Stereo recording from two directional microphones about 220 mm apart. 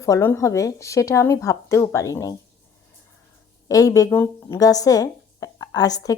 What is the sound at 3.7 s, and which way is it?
Speech, 15° left (ahead or behind).